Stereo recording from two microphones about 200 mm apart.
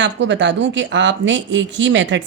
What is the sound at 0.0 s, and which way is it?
Speech, 65° right (ahead or behind).